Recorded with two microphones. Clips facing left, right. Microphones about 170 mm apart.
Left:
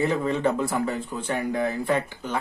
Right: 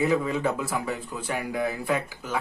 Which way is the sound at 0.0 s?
5° right (ahead or behind).